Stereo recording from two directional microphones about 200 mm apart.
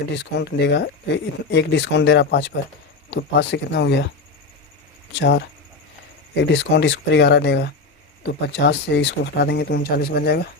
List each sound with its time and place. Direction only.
0.1 s speech: 55° left (ahead or behind)
5.1 s speech: 60° left (ahead or behind)